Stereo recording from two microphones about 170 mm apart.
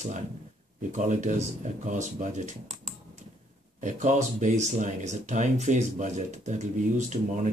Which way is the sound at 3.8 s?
45° right (ahead or behind).